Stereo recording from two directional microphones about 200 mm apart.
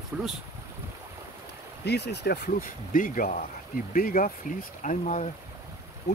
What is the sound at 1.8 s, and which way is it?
Speech, 55° left (ahead or behind).